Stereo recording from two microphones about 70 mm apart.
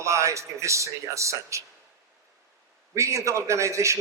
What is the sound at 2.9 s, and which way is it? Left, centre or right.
A man's voice, right.